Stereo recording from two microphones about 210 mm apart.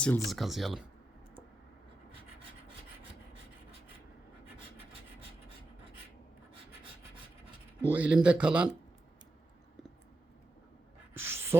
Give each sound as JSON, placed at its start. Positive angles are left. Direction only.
{"t": 0.0, "sound": "speech", "side_deg": 5}
{"t": 7.9, "sound": "speech", "side_deg": -5}
{"t": 11.1, "sound": "a sound", "side_deg": -10}